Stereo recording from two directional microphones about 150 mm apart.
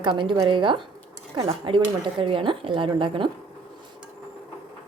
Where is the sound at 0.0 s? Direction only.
30° right (ahead or behind).